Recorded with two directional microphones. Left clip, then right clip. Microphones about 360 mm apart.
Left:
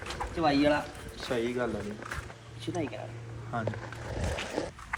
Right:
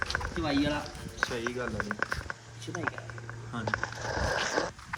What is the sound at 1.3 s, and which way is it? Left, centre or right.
Speech, centre.